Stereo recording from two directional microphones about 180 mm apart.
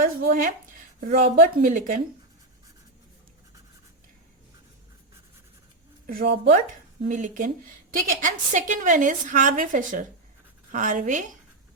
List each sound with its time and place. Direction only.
0.0 s a sound: 50° right (ahead or behind)
1.1 s a woman's voice: 45° right (ahead or behind)
6.1 s a woman's voice: 50° right (ahead or behind)